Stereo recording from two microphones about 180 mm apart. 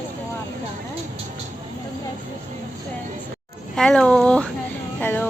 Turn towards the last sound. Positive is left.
turn(degrees=10)  # may be behind; listen again after turning